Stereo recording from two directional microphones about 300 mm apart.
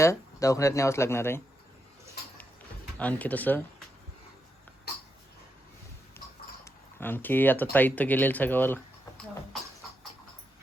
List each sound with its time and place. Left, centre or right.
0.0 s speech: centre
3.0 s speech: centre
6.7 s speech: centre